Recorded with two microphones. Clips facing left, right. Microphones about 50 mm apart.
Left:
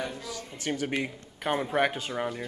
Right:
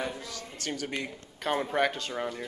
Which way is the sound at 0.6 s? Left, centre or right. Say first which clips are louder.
Left 4 dB; left.